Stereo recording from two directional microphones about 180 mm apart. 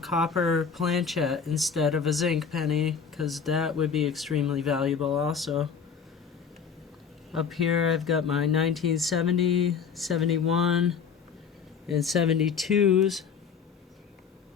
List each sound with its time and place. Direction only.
0.0 s speech: centre (ahead or behind)
7.3 s speech: centre (ahead or behind)